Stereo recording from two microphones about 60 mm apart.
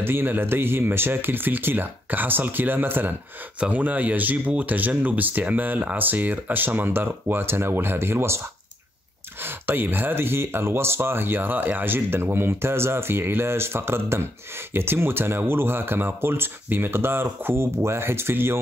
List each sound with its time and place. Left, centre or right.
0.0 s speech: right
3.5 s speech: right
9.4 s speech: right